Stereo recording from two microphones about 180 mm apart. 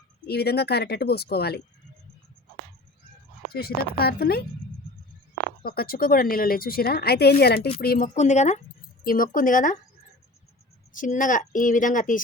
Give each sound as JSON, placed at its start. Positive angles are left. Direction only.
{"t": 0.3, "sound": "speech", "side_deg": 65}
{"t": 3.5, "sound": "speech", "side_deg": 60}
{"t": 5.6, "sound": "speech", "side_deg": 55}
{"t": 9.0, "sound": "a woman's voice", "side_deg": 50}
{"t": 10.9, "sound": "a woman's voice", "side_deg": 45}